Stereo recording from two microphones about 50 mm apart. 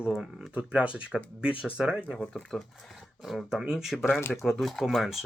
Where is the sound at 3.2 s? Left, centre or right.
Centre.